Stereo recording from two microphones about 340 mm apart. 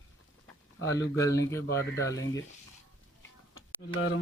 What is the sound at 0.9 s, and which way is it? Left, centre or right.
Speech, centre.